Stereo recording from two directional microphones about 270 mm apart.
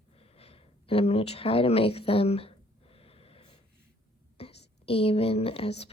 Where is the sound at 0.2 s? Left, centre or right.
Left.